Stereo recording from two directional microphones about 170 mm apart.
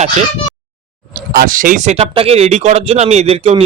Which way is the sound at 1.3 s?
55° right (ahead or behind).